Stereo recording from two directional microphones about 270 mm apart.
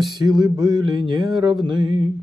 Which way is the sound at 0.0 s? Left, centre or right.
Centre.